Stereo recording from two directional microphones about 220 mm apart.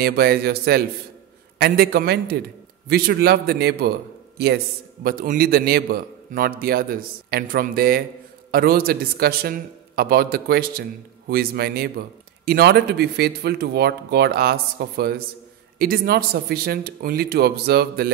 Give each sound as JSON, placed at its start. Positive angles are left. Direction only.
{"t": 0.0, "sound": "a man's voice", "side_deg": -45}
{"t": 5.0, "sound": "a man's voice", "side_deg": -40}